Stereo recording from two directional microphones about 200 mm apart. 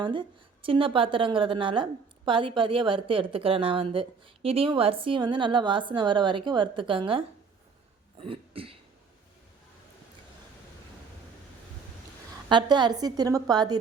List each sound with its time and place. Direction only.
0.0 s a woman's voice: 25° right (ahead or behind)
12.5 s a woman's voice: 20° right (ahead or behind)